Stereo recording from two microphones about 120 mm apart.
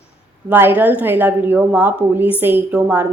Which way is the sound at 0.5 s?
15° right (ahead or behind).